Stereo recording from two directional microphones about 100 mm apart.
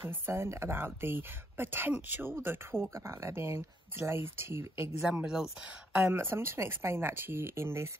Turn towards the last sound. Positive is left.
turn(degrees=-25)  # may be behind; listen again after turning